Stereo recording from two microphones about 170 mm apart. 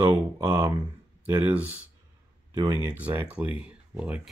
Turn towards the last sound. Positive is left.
turn(degrees=-5)  # may be behind; listen again after turning